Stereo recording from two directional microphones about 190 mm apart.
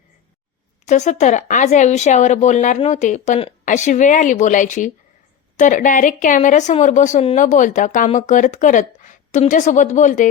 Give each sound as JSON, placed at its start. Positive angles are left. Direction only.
{"t": 0.9, "sound": "speech", "side_deg": 40}